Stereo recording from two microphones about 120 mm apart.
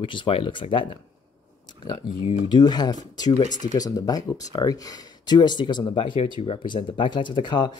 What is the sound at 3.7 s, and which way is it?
Speech, 30° left (ahead or behind).